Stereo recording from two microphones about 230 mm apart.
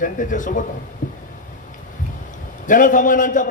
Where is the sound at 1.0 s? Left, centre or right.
Left.